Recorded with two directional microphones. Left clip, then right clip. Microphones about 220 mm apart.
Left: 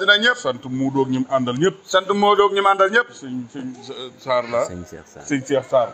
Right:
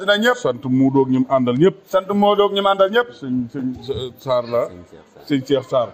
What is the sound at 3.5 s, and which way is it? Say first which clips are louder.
Speech: right 7 dB; 50° right (ahead or behind).